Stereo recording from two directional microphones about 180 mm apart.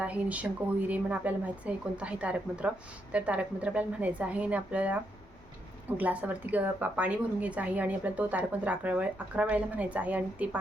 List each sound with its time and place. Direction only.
0.0 s a woman's voice: 5° right (ahead or behind)
6.0 s a woman's voice: 10° right (ahead or behind)